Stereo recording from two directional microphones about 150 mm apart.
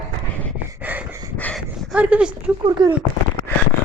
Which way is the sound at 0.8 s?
10° right (ahead or behind).